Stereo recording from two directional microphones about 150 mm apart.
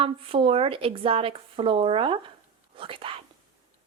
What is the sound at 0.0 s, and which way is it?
A woman's voice, 35° right (ahead or behind).